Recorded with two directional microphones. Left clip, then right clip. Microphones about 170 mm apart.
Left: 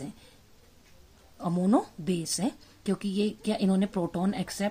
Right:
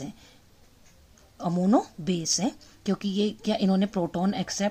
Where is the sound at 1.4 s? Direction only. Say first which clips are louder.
Right 2 dB; 15° right (ahead or behind).